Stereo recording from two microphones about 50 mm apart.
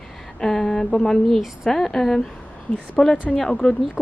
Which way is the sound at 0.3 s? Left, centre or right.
Centre.